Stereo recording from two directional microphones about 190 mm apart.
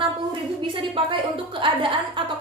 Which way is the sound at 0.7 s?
25° right (ahead or behind).